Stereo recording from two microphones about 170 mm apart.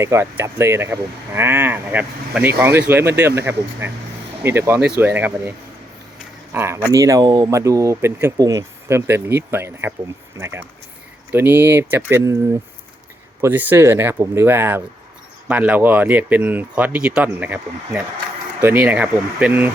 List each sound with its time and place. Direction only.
0.0 s speech: 15° right (ahead or behind)
13.4 s speech: 10° right (ahead or behind)